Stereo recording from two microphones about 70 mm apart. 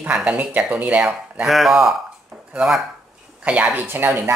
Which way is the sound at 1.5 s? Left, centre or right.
Centre.